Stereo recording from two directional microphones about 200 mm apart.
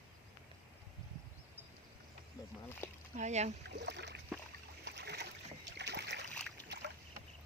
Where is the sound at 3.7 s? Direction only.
60° right (ahead or behind).